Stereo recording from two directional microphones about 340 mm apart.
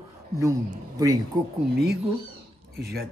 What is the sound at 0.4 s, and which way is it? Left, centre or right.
Speech, centre.